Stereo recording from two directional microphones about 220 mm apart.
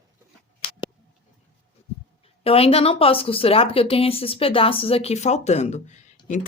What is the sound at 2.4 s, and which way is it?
Speech, 25° left (ahead or behind).